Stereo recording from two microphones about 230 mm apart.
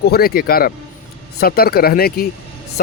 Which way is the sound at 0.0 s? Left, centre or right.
Left.